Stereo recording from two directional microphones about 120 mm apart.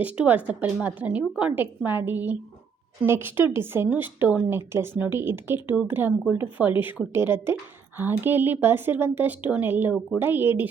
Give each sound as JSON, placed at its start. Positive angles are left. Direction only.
{"t": 0.0, "sound": "a woman's voice", "side_deg": -10}